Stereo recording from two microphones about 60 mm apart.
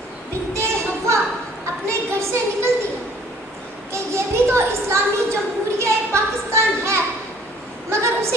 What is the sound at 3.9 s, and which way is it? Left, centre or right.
Speech, right.